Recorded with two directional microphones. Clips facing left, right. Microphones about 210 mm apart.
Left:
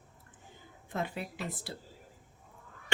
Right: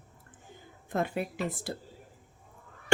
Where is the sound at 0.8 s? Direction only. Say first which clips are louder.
Right 5 dB; 50° right (ahead or behind).